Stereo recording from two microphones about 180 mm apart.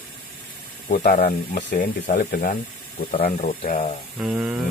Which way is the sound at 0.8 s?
50° left (ahead or behind).